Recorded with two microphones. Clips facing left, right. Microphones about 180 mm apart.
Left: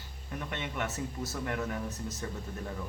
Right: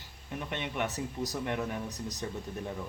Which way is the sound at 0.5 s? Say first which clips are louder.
Right 2 dB; 20° right (ahead or behind).